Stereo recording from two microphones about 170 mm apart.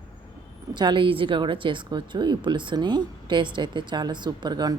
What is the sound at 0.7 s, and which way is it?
A woman's voice, 25° right (ahead or behind).